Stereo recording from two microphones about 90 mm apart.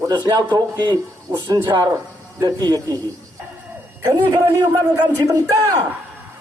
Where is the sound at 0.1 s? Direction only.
50° right (ahead or behind).